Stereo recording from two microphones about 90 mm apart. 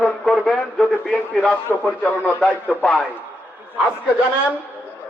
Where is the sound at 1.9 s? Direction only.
15° left (ahead or behind).